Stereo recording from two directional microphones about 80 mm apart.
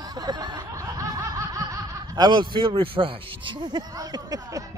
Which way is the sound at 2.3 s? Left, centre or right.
Right.